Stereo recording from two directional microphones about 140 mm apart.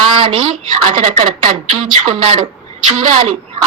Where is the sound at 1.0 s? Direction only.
50° right (ahead or behind).